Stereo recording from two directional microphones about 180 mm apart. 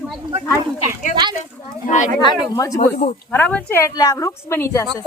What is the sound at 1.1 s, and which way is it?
Speech, 25° right (ahead or behind).